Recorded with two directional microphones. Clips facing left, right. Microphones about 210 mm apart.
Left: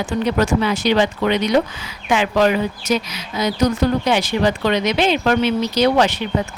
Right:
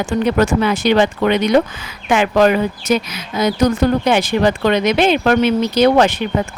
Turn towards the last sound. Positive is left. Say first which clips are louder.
# right 4 dB
turn(degrees=-50)  # may be behind; listen again after turning